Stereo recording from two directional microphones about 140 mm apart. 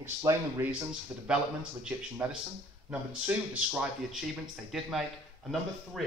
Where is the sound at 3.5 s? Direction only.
10° right (ahead or behind).